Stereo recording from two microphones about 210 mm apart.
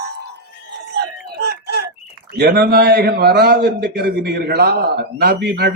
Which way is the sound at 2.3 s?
50° right (ahead or behind).